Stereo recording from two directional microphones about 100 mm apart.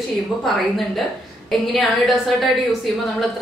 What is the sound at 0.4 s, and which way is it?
A woman's voice, centre (ahead or behind).